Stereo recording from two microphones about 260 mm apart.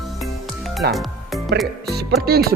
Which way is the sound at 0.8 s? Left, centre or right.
Right.